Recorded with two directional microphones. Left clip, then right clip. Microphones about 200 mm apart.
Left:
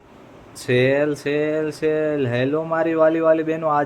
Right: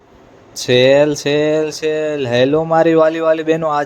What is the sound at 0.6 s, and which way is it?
Speech, 25° right (ahead or behind).